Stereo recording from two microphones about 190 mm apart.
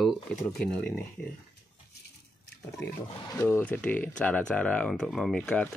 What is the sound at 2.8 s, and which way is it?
Speech, 10° left (ahead or behind).